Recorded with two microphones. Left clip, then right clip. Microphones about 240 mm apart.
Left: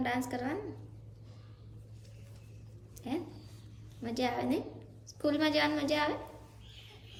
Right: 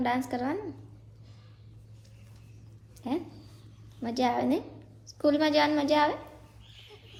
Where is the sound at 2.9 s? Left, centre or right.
Centre.